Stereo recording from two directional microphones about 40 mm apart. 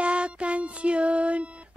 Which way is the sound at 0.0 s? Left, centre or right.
Right.